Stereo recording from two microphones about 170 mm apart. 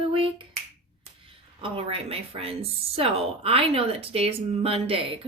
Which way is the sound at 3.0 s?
35° right (ahead or behind).